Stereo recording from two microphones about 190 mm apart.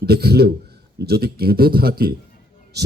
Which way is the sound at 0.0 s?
55° right (ahead or behind).